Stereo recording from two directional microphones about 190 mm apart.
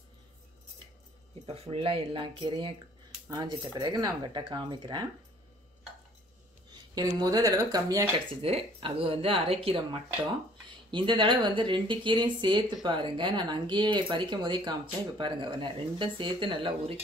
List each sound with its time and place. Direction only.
1.4 s speech: 30° right (ahead or behind)
7.0 s speech: 20° right (ahead or behind)